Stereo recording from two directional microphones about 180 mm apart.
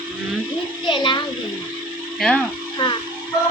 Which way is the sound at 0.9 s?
25° left (ahead or behind).